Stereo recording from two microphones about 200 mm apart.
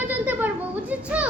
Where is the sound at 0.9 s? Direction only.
5° right (ahead or behind).